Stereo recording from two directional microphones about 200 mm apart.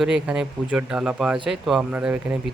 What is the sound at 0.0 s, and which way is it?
Speech, 5° right (ahead or behind).